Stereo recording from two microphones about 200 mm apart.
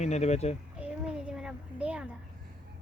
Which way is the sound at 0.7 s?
5° right (ahead or behind).